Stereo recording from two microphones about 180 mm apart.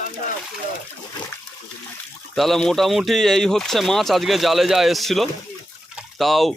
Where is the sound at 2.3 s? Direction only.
Centre (ahead or behind).